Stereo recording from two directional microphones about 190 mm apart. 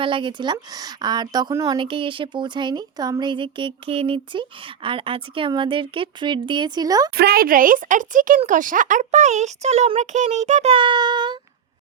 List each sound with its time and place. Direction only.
0.0 s a woman's voice: 25° right (ahead or behind)
7.2 s speech: 55° right (ahead or behind); by 11.3 s 25° right (ahead or behind)